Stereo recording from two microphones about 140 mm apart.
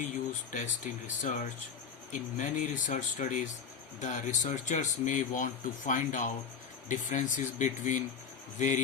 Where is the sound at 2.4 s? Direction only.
70° left (ahead or behind).